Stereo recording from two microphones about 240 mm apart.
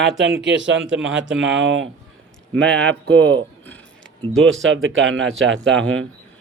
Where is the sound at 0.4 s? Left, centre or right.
Right.